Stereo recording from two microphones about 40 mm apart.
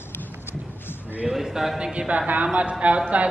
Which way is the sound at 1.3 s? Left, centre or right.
Centre.